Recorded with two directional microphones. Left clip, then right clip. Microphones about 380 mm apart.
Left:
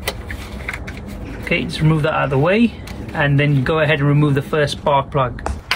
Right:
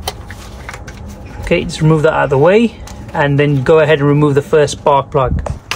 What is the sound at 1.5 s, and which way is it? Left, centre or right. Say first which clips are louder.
Speech: right 6 dB; right.